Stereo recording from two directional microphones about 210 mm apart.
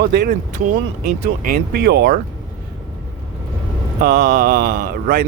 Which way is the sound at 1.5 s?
45° right (ahead or behind).